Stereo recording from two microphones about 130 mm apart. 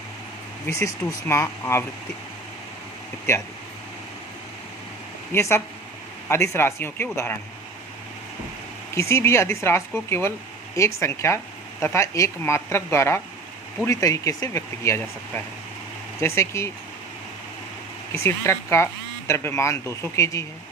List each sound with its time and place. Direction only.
1.3 s speech: 20° left (ahead or behind)
5.3 s speech: 20° left (ahead or behind)
9.0 s speech: 20° left (ahead or behind)
16.2 s speech: 20° left (ahead or behind)
18.2 s speech: 20° left (ahead or behind)